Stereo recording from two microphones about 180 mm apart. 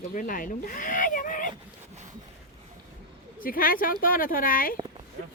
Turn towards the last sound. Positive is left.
turn(degrees=50)  # may be behind; listen again after turning